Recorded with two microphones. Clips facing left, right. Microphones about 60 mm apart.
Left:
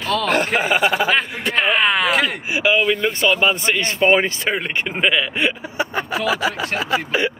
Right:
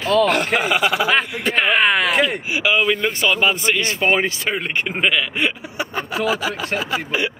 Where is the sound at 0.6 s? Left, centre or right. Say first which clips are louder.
Left 1 dB; left.